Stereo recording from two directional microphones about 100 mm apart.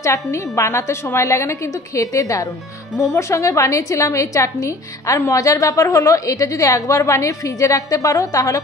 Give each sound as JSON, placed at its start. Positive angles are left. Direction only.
{"t": 0.0, "sound": "a woman's voice", "side_deg": 30}